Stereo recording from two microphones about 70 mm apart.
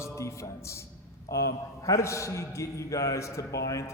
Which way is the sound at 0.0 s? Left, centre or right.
Left.